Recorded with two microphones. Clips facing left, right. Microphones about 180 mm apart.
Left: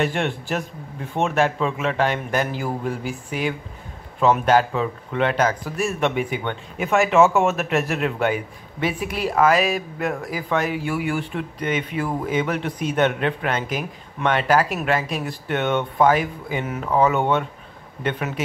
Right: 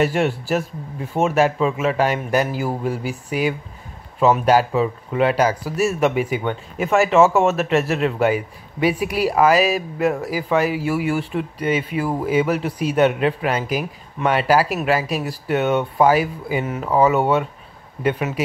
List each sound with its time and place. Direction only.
0.0 s speech: 5° right (ahead or behind)